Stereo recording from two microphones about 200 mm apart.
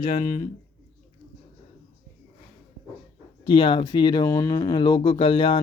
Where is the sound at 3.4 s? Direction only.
25° left (ahead or behind).